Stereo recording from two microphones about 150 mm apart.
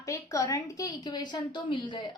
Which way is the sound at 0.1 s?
20° left (ahead or behind).